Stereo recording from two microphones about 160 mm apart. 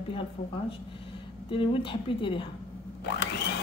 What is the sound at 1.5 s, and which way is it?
Speech, 30° left (ahead or behind).